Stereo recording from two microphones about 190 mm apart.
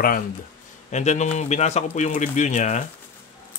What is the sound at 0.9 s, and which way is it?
Speech, 40° left (ahead or behind).